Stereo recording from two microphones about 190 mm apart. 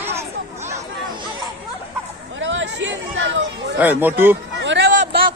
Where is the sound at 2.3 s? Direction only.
80° right.